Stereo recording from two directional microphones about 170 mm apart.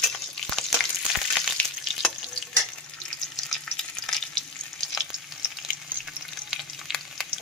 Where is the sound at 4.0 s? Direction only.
5° left (ahead or behind).